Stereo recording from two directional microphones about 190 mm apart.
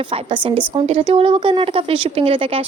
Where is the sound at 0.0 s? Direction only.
25° right (ahead or behind).